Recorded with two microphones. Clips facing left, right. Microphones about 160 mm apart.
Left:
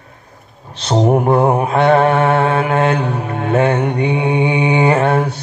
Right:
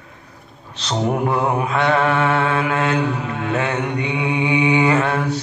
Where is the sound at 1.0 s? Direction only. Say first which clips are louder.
Left 6 dB; 30° left (ahead or behind).